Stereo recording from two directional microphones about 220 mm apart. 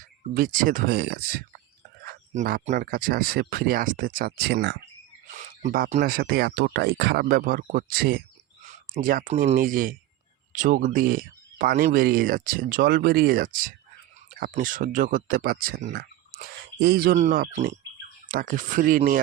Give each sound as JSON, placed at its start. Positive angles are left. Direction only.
{"t": 0.3, "sound": "speech", "side_deg": -40}
{"t": 5.3, "sound": "speech", "side_deg": -35}